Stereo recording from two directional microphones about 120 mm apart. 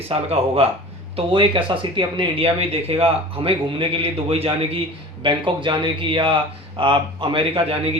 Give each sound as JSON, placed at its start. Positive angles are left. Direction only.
{"t": 0.1, "sound": "speech", "side_deg": -55}